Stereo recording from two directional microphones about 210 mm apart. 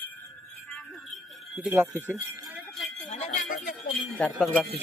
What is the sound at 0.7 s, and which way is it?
Music, 5° left (ahead or behind).